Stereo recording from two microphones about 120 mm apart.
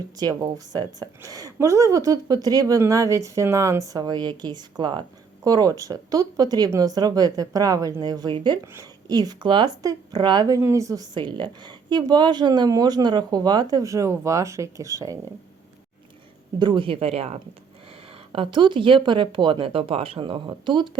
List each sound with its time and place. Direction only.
0.2 s a woman's voice: 35° right (ahead or behind)
8.6 s speech: 20° right (ahead or behind)
9.0 s a woman's voice: 35° right (ahead or behind)
16.6 s speech: 40° right (ahead or behind); by 17.4 s 55° right (ahead or behind)
18.3 s speech: 45° right (ahead or behind)